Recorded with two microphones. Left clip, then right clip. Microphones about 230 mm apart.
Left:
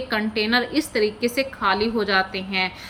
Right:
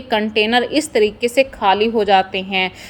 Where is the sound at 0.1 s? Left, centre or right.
Centre.